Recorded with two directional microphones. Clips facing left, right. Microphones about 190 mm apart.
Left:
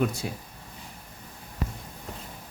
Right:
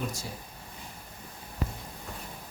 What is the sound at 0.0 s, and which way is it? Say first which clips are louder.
Speech: left 9 dB; 60° left (ahead or behind).